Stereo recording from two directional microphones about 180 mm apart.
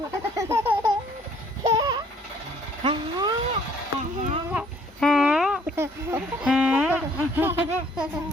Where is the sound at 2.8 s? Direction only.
25° right (ahead or behind).